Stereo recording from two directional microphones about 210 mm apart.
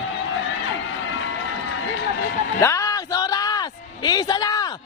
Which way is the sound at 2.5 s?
15° left (ahead or behind).